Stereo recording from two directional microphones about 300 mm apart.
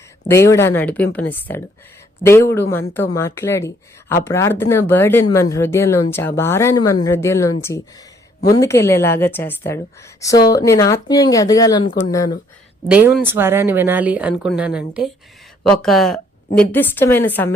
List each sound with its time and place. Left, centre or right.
0.3 s a woman's voice: centre
7.7 s speech: left
8.5 s a woman's voice: centre
11.9 s speech: left
12.1 s a woman's voice: centre
12.9 s a woman's voice: centre